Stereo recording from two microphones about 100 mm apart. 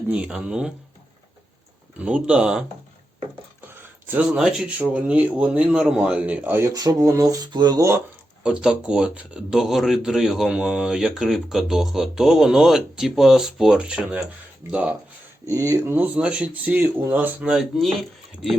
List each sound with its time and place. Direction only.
0.1 s a man's voice: 10° right (ahead or behind)
2.0 s a man's voice: 10° right (ahead or behind)
3.7 s a sound: 20° right (ahead or behind)
4.3 s a man's voice: 5° right (ahead or behind)
6.7 s rub: 35° right (ahead or behind)
8.4 s a man's voice: 10° right (ahead or behind)
15.4 s speech: 30° right (ahead or behind)
15.9 s a man's voice: 15° right (ahead or behind)
17.5 s speech: centre (ahead or behind)